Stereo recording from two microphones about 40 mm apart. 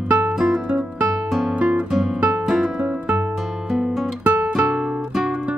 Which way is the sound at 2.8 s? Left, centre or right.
Right.